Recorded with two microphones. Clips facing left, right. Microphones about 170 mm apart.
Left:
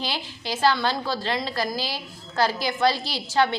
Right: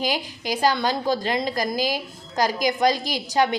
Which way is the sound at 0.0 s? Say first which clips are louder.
Right 5 dB; 15° right (ahead or behind).